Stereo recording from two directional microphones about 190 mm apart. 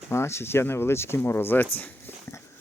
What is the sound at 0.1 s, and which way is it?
Speech, 15° left (ahead or behind).